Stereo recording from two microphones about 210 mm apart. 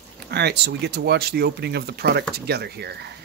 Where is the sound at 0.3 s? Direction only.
50° right (ahead or behind).